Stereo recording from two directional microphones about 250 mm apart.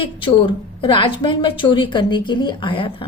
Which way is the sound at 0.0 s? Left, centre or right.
Centre.